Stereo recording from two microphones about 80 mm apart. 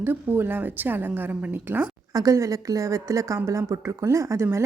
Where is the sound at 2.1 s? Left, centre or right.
Right.